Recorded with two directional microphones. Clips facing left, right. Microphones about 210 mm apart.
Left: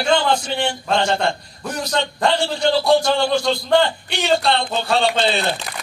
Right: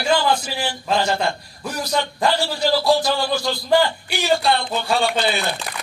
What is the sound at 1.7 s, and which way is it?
A man's voice, 25° left (ahead or behind).